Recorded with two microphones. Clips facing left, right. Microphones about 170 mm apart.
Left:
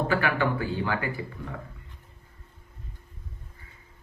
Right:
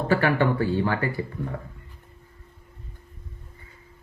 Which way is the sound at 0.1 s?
40° right (ahead or behind).